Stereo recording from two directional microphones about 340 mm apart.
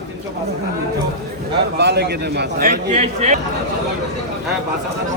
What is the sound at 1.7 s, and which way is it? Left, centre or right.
A man's voice, right.